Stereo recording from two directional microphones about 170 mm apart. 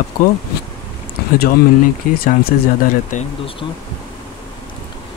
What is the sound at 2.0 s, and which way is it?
Speech, 50° left (ahead or behind).